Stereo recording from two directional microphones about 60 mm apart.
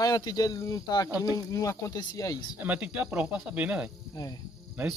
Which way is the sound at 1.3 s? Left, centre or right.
Left.